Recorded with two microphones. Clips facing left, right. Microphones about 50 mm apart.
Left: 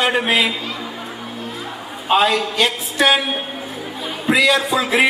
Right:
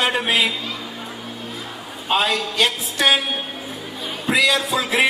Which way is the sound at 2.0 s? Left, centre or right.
Centre.